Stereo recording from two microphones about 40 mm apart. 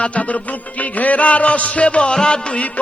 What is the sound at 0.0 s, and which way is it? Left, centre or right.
Music, left.